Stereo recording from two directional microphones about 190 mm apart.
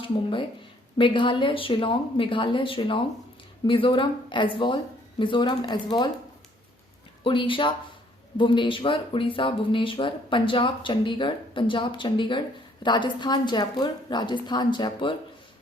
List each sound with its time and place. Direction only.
0.0 s speech: 25° left (ahead or behind)
7.3 s speech: 25° left (ahead or behind)